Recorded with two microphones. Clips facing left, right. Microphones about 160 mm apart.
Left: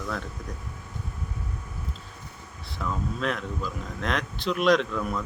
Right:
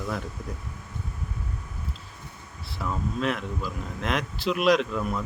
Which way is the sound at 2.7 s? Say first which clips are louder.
Right 1 dB; 5° right (ahead or behind).